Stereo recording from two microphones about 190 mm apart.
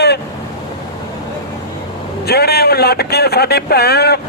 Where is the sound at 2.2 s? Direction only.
55° left (ahead or behind).